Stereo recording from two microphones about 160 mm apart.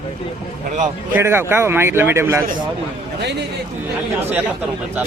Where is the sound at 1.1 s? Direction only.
15° right (ahead or behind).